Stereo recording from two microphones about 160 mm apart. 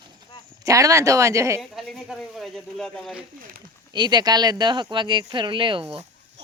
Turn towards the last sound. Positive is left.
turn(degrees=-35)  # may be behind; listen again after turning